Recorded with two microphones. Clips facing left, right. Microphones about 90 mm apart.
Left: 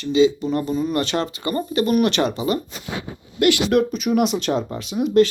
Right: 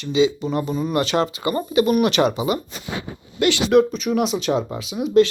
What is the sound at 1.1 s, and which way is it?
Speech, 30° right (ahead or behind).